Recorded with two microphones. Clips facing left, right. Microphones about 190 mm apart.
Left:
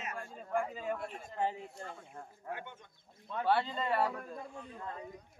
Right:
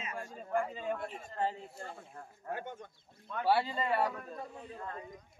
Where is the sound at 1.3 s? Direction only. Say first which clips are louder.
Even; 15° left (ahead or behind).